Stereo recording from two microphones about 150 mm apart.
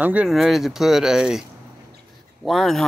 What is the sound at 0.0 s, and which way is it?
Speech, 10° right (ahead or behind).